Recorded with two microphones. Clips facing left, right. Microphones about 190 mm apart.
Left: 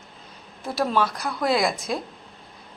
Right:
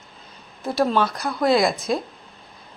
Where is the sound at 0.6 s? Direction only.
Centre (ahead or behind).